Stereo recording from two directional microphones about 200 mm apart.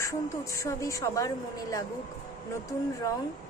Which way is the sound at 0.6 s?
15° left (ahead or behind).